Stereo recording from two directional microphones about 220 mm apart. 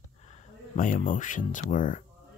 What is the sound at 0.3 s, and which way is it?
Speech, 35° left (ahead or behind).